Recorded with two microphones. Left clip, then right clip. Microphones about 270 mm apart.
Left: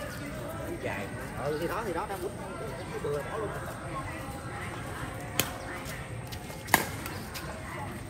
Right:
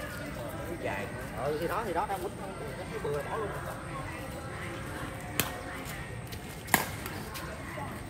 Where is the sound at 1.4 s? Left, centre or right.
Right.